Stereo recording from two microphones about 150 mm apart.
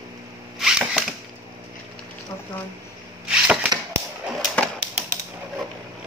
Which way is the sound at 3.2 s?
10° right (ahead or behind).